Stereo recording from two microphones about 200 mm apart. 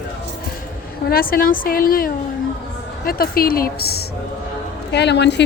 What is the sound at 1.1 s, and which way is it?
A woman's voice, 45° left (ahead or behind).